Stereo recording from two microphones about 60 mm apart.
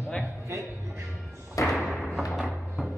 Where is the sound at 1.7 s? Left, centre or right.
Centre.